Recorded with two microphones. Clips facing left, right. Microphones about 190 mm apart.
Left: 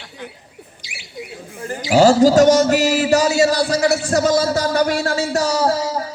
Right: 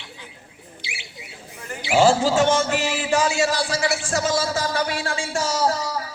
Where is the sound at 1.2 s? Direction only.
50° left (ahead or behind).